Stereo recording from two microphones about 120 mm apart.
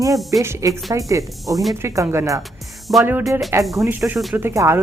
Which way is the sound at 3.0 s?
15° right (ahead or behind).